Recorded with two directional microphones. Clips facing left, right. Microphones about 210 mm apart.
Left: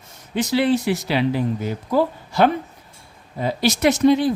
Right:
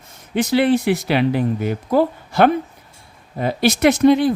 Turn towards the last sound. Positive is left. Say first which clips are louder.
# right 3 dB
turn(degrees=-55)  # may be behind; listen again after turning